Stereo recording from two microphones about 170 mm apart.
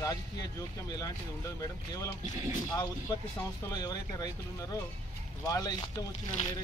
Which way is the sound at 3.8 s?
25° left (ahead or behind).